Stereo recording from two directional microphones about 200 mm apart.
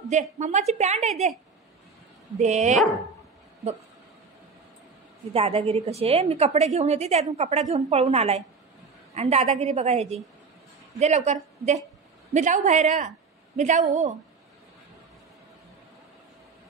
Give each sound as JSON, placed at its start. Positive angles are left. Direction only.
{"t": 0.1, "sound": "a woman's voice", "side_deg": -35}
{"t": 2.3, "sound": "a woman's voice", "side_deg": -35}
{"t": 5.3, "sound": "a woman's voice", "side_deg": -30}